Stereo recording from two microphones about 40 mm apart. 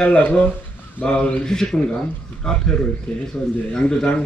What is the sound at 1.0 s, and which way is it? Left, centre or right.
A man's voice, left.